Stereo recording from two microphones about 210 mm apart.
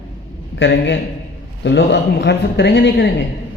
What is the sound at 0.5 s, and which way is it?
A man's voice, 55° left (ahead or behind).